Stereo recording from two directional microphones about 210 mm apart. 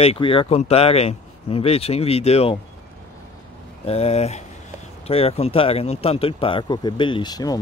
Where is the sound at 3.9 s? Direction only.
30° left (ahead or behind).